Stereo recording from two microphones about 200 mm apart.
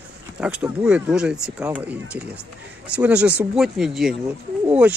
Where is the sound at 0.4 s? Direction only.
5° right (ahead or behind).